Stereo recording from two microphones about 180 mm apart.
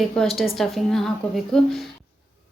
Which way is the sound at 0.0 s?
Centre (ahead or behind).